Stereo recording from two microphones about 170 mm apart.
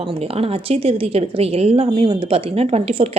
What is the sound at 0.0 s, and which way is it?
A woman's voice, 35° right (ahead or behind).